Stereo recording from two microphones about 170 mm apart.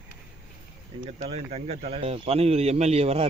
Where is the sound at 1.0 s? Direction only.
35° right (ahead or behind).